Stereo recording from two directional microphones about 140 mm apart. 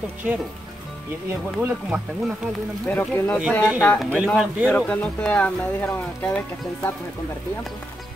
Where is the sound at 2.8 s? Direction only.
15° left (ahead or behind).